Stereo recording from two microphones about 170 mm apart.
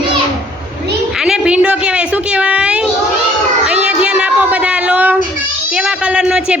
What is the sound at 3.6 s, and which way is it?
Child singing, 5° right (ahead or behind).